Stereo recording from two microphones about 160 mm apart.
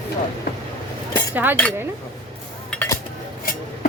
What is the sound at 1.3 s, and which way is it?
Speech, 10° right (ahead or behind).